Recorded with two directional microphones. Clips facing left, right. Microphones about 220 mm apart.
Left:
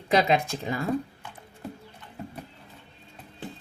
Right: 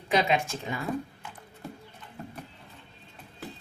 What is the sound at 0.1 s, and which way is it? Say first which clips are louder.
Speech: left 3 dB; 35° left (ahead or behind).